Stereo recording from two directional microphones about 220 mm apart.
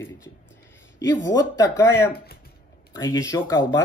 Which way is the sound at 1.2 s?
15° left (ahead or behind).